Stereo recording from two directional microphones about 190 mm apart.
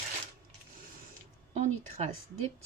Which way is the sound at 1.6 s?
40° right (ahead or behind).